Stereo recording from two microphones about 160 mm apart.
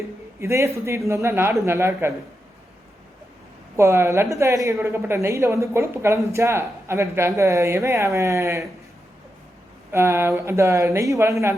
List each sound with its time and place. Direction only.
0.3 s a man's voice: 15° right (ahead or behind)
3.8 s a woman's voice: 15° right (ahead or behind)
9.9 s a woman's voice: 15° right (ahead or behind)